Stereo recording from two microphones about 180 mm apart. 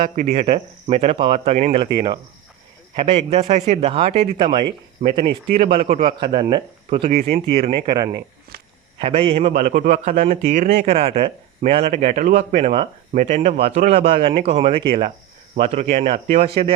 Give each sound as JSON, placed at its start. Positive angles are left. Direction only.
{"t": 0.2, "sound": "speech", "side_deg": -30}
{"t": 5.6, "sound": "a man's voice", "side_deg": -35}
{"t": 7.9, "sound": "a man's voice", "side_deg": -20}
{"t": 9.0, "sound": "speech", "side_deg": -35}